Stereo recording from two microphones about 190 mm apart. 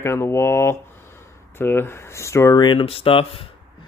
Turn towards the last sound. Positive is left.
turn(degrees=30)  # may be behind; listen again after turning